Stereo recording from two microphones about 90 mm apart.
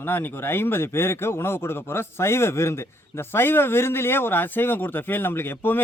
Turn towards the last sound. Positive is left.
turn(degrees=25)  # may be behind; listen again after turning